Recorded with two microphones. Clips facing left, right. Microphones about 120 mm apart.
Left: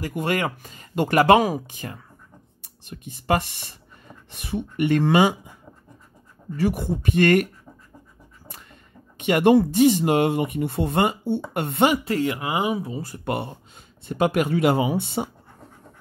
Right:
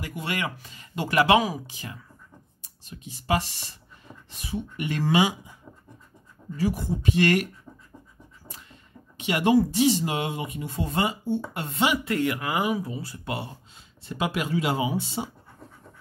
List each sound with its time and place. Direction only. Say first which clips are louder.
0.0 s speech: left 6 dB; 45° left (ahead or behind)
2.6 s speech: left 4 dB; 60° left (ahead or behind)
6.5 s speech: left 3 dB; 65° left (ahead or behind)
8.5 s speech: left 3 dB; 55° left (ahead or behind)
11.9 s speech: left 2 dB; 30° left (ahead or behind)
12.9 s speech: left 5 dB; 50° left (ahead or behind)